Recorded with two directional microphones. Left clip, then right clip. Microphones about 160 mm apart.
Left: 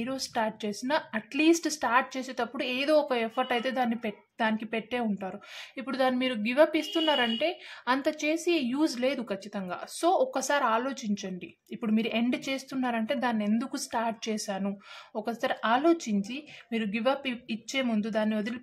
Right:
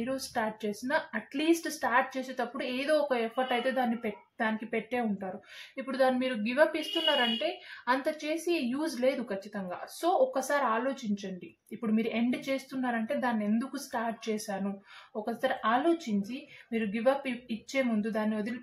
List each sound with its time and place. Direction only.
0.0 s speech: 30° left (ahead or behind)